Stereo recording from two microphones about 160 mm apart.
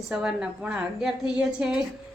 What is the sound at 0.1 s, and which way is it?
A woman's voice, 5° right (ahead or behind).